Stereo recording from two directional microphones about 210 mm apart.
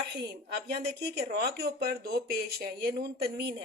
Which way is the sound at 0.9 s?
50° right (ahead or behind).